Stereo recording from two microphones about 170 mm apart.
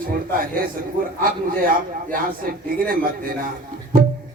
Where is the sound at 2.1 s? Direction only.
55° right (ahead or behind).